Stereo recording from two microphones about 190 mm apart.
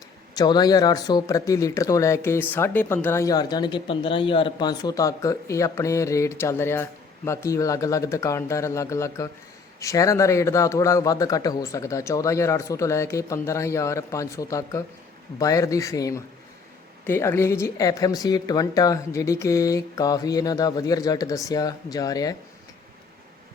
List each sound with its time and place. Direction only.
0.3 s a woman's voice: 20° left (ahead or behind)